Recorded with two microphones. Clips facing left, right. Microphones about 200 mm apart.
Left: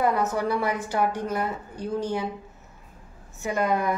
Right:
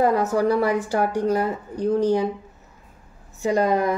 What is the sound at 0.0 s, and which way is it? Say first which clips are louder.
Speech: right 5 dB; 35° right (ahead or behind).